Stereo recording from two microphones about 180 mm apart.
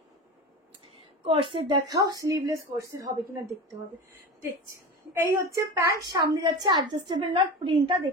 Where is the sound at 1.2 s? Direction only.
30° right (ahead or behind).